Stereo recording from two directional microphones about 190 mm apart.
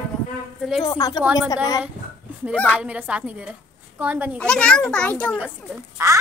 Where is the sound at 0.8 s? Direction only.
20° left (ahead or behind).